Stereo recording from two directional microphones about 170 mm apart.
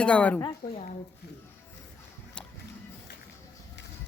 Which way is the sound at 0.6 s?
55° left (ahead or behind).